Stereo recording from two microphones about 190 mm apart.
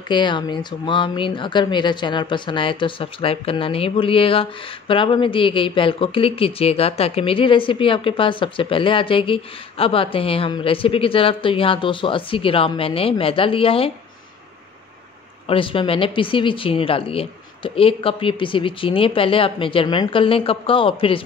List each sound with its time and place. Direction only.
0.1 s speech: 25° left (ahead or behind)
15.4 s speech: 30° left (ahead or behind)